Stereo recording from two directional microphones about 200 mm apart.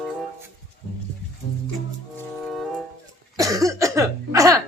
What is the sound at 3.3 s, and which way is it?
Cough, 15° right (ahead or behind).